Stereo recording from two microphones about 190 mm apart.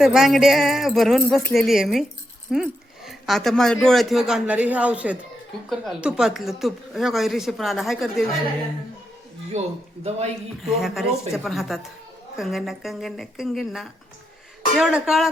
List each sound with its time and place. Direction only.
0.0 s speech: centre (ahead or behind)
9.5 s a man's voice: 35° right (ahead or behind)
10.7 s speech: centre (ahead or behind)